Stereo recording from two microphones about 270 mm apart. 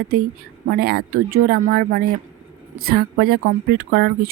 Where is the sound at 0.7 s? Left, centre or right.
Right.